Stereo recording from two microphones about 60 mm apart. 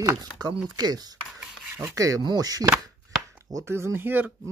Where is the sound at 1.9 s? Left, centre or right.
Right.